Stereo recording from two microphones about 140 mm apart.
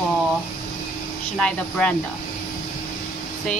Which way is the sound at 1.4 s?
10° left (ahead or behind).